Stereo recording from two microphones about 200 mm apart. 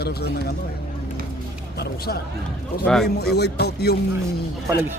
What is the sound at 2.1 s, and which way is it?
Speech, 50° left (ahead or behind).